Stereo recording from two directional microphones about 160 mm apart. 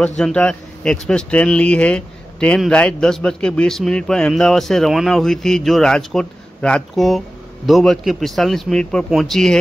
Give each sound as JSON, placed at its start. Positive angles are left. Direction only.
{"t": 0.2, "sound": "speech", "side_deg": 5}